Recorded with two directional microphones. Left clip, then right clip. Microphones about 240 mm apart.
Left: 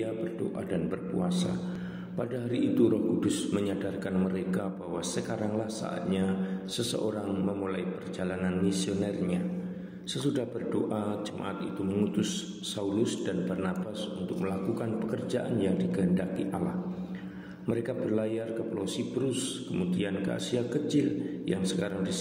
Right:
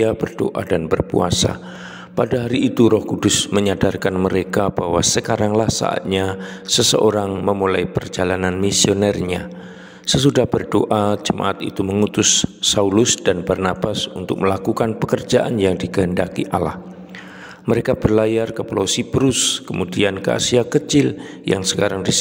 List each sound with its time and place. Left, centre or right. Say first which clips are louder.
0.0 s a man's voice: right 15 dB; right
17.6 s a man's voice: right 14 dB; right